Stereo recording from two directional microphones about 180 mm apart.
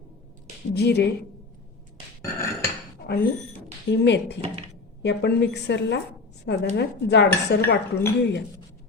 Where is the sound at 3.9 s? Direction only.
75° left (ahead or behind).